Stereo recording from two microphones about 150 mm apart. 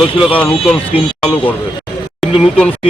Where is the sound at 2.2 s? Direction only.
Centre (ahead or behind).